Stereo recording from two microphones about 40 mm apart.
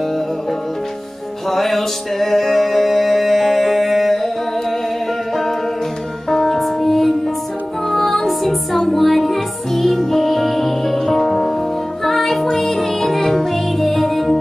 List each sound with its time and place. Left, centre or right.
1.5 s music: centre
6.3 s music: centre
6.6 s music: centre